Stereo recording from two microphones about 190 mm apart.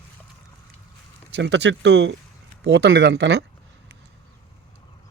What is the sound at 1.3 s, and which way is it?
Speech, 65° right (ahead or behind).